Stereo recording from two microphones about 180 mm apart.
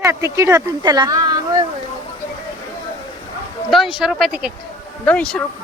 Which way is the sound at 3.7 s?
5° right (ahead or behind).